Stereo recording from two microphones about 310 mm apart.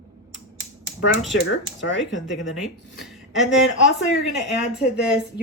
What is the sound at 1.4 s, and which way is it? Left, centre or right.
Speech, left.